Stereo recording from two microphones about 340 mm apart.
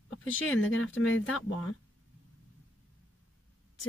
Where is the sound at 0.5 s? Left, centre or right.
Left.